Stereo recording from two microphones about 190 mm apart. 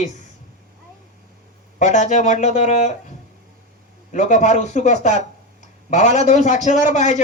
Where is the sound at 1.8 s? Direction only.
40° left (ahead or behind).